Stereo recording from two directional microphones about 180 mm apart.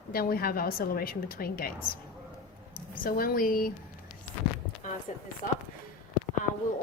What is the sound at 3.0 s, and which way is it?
Speech, 55° left (ahead or behind).